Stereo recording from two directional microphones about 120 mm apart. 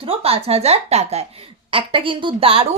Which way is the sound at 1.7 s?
45° right (ahead or behind).